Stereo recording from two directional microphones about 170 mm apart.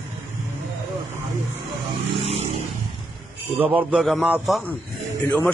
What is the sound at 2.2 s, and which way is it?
Vehicle, 40° right (ahead or behind).